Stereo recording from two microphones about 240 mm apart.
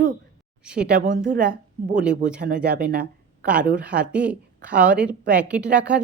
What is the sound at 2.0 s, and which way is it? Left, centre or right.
Speech, centre.